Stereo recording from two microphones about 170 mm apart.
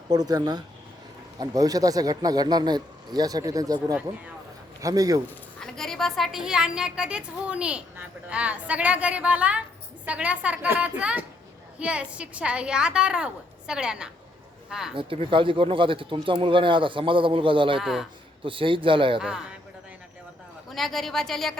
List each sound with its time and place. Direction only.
0.1 s speech: 25° right (ahead or behind)
5.5 s a woman's voice: 5° left (ahead or behind)
14.9 s speech: 30° right (ahead or behind)
17.7 s a woman's voice: centre (ahead or behind)
18.4 s speech: 30° right (ahead or behind)
20.7 s a woman's voice: centre (ahead or behind)